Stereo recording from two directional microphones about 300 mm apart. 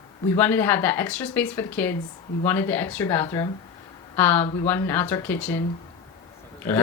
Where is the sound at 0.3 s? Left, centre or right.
Centre.